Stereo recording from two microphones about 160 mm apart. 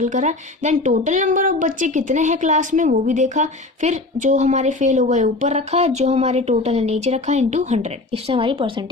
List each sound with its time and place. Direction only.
0.0 s a woman's voice: 50° right (ahead or behind); by 8.8 s 30° right (ahead or behind)